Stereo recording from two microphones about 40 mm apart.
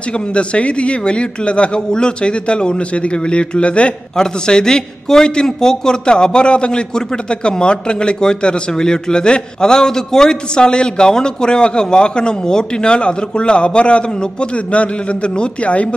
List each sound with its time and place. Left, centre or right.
0.3 s a man's voice: left
4.2 s a man's voice: centre
15.3 s speech: left